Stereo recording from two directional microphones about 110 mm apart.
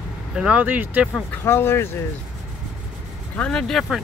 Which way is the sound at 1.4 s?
25° left (ahead or behind).